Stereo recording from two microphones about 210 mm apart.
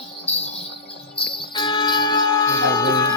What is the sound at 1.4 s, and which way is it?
Bell, 25° left (ahead or behind).